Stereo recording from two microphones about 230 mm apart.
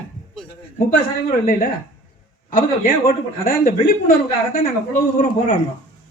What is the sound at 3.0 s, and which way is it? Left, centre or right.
A woman's voice, left.